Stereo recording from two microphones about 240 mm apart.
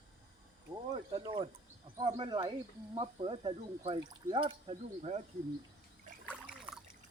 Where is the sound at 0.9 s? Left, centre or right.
Centre.